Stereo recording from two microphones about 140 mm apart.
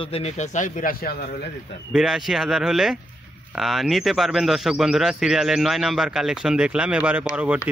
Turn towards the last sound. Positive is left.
turn(degrees=-10)  # may be behind; listen again after turning